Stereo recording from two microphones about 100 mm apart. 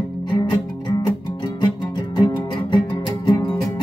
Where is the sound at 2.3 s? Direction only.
50° left (ahead or behind).